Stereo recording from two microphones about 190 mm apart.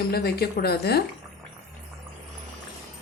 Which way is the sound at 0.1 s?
55° left (ahead or behind).